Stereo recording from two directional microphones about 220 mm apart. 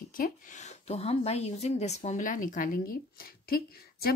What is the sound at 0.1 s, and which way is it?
A woman's voice, 35° left (ahead or behind).